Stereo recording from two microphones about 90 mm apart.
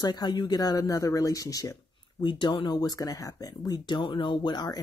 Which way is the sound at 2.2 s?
60° left (ahead or behind).